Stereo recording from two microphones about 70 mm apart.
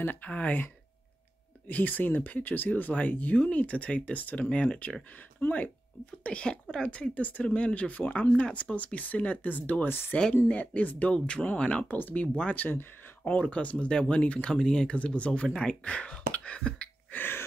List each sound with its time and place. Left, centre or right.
0.0 s speech: left
1.7 s speech: left
17.1 s throat clearing: left